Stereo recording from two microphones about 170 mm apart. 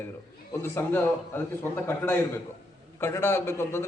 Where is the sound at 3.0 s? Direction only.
15° left (ahead or behind).